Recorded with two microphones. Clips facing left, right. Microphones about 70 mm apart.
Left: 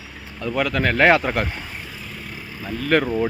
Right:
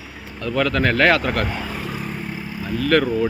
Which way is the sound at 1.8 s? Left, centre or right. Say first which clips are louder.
Right 8 dB; right.